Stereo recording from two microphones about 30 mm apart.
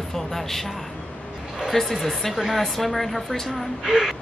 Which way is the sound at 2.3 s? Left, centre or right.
Centre.